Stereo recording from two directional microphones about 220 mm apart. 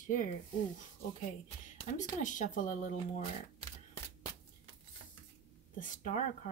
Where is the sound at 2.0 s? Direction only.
35° left (ahead or behind).